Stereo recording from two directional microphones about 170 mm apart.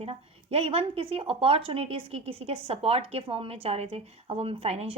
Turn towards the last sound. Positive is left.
turn(degrees=-35)  # may be behind; listen again after turning